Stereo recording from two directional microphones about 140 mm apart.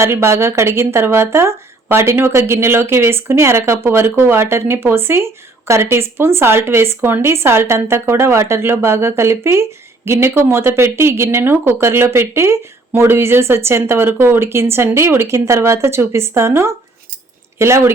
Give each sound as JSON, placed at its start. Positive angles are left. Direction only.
{"t": 0.0, "sound": "speech", "side_deg": -20}